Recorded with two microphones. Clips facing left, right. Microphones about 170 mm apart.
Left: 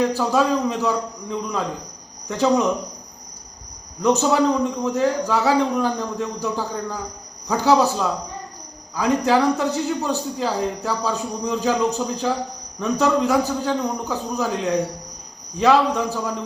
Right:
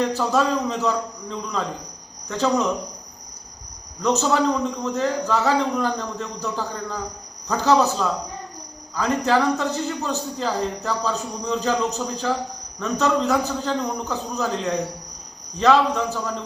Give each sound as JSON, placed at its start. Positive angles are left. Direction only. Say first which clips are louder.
{"t": 0.2, "sound": "a man's voice", "louder": "left 2 dB", "side_deg": 10}
{"t": 4.0, "sound": "a man's voice", "louder": "left 2 dB", "side_deg": 15}